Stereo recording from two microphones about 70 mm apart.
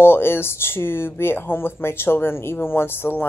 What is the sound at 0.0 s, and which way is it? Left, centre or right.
Speech, left.